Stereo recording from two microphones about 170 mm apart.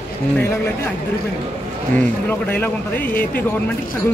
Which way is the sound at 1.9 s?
10° left (ahead or behind).